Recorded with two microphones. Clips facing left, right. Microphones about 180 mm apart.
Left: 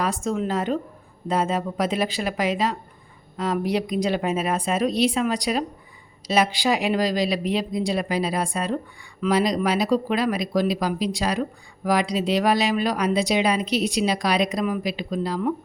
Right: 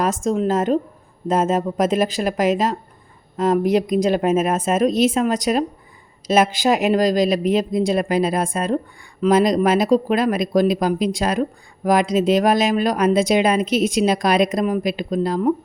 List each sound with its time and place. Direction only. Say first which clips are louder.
0.0 s speech: right 5 dB; 45° right (ahead or behind)